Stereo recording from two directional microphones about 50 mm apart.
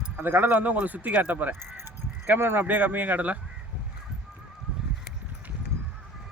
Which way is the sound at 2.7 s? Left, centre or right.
Right.